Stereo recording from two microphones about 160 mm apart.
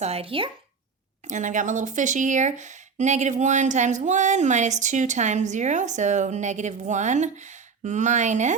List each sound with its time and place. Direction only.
0.0 s speech: 40° right (ahead or behind)
1.3 s speech: 50° right (ahead or behind)